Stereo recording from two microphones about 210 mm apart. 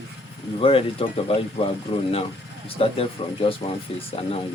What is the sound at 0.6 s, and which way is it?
Speech, 25° left (ahead or behind).